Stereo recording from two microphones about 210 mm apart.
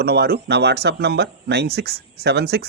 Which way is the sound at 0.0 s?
50° right (ahead or behind).